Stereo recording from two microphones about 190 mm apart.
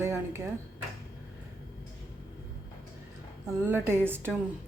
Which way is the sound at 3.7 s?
10° right (ahead or behind).